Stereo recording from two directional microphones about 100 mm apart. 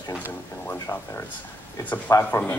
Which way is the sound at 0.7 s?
30° left (ahead or behind).